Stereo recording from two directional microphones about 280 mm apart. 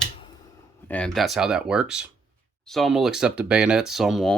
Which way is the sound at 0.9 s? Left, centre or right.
Centre.